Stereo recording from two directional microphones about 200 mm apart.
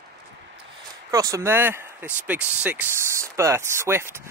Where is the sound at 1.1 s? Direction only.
15° right (ahead or behind).